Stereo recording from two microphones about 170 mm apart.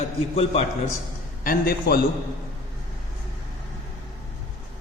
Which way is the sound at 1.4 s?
60° left (ahead or behind).